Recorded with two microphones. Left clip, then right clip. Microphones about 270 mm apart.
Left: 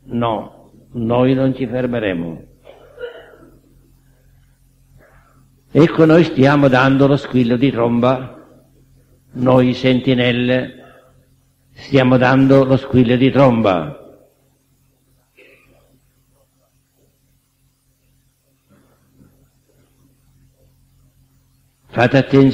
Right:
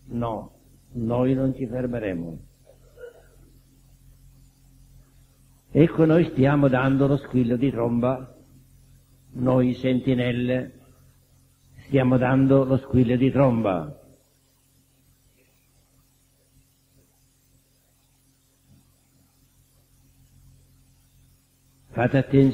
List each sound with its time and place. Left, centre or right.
0.1 s a man's voice: left
5.7 s a man's voice: left
9.4 s a man's voice: left
11.9 s a man's voice: left
21.9 s a man's voice: left